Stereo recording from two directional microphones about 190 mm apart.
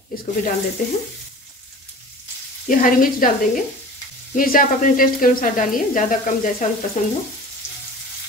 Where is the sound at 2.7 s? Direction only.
45° left (ahead or behind).